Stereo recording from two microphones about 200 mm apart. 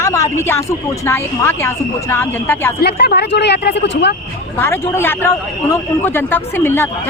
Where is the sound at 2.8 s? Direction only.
55° left (ahead or behind).